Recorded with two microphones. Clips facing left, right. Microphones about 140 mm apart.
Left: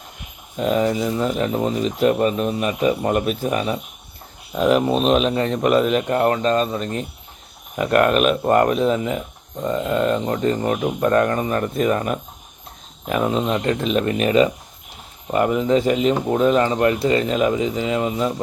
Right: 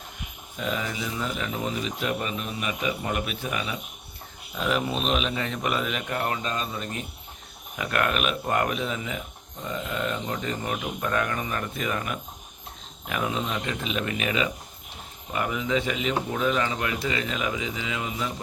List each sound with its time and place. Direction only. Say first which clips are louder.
0.5 s speech: left 11 dB; 40° left (ahead or behind)